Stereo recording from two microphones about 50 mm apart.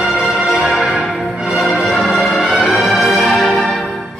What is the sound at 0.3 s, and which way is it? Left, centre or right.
Music, centre.